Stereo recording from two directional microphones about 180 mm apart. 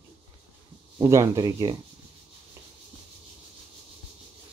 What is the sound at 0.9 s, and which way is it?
Speech, 15° right (ahead or behind).